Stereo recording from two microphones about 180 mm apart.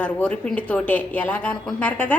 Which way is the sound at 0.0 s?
5° left (ahead or behind).